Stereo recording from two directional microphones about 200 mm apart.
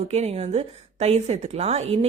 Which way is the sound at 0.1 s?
30° right (ahead or behind).